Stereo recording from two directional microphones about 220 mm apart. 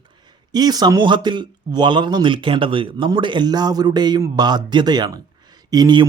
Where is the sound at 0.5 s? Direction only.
20° right (ahead or behind).